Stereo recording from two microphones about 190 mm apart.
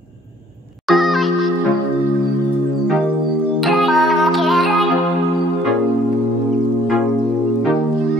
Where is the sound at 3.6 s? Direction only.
Centre (ahead or behind).